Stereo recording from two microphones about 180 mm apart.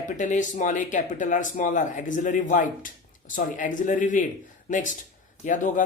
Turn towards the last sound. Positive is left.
turn(degrees=45)  # may be behind; listen again after turning